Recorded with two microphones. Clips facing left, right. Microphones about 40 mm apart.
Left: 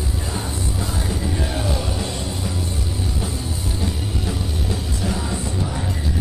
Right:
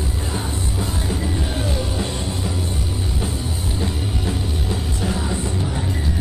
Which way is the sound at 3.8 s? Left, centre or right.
Centre.